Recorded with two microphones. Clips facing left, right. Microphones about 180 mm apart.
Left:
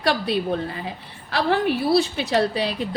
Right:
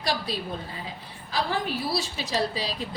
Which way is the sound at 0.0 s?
60° left (ahead or behind).